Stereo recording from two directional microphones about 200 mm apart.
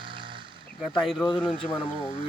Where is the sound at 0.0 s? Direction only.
25° right (ahead or behind).